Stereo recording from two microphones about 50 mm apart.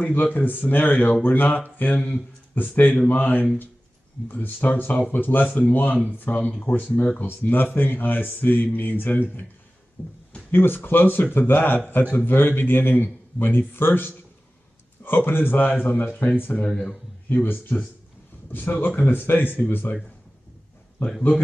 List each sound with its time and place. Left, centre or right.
0.0 s speech: left